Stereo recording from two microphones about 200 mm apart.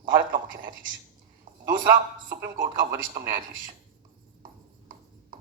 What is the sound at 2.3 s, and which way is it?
Speech, 45° right (ahead or behind).